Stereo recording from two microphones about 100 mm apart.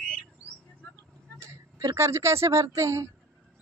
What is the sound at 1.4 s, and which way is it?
Speech, 30° right (ahead or behind).